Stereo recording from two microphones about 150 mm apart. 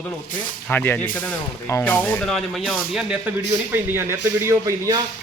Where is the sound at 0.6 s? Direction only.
10° left (ahead or behind); by 3.1 s 5° right (ahead or behind).